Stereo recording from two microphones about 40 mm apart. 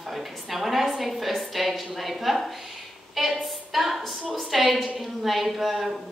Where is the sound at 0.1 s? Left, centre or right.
Centre.